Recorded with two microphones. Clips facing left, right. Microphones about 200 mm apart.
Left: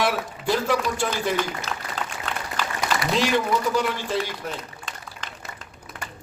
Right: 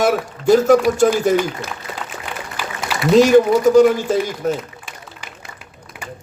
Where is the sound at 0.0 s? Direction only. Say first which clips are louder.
Right 8 dB; 45° right (ahead or behind).